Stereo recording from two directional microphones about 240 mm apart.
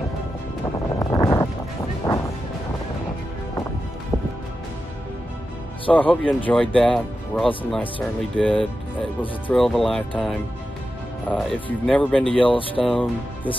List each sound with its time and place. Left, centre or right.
0.9 s music: centre
5.9 s speech: centre
12.4 s speech: left
12.8 s speech: centre